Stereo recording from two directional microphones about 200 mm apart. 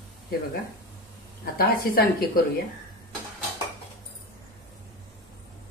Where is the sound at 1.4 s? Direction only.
45° left (ahead or behind).